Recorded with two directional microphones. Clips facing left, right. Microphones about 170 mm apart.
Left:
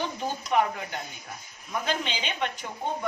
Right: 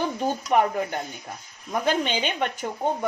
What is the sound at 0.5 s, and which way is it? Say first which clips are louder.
Speech: right 3 dB; 45° right (ahead or behind).